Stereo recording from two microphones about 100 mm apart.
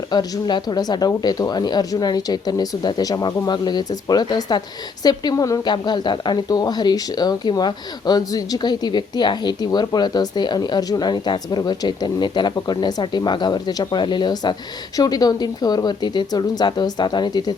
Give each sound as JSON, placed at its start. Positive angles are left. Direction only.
{"t": 0.1, "sound": "a woman's voice", "side_deg": 45}